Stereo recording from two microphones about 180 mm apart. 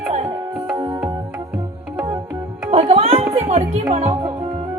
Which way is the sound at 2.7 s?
35° right (ahead or behind).